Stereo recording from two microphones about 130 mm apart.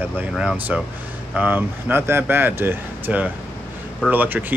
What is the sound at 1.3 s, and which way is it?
Speech, 15° right (ahead or behind).